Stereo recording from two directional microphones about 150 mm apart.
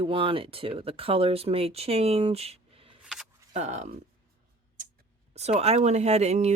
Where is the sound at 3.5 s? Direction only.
50° right (ahead or behind).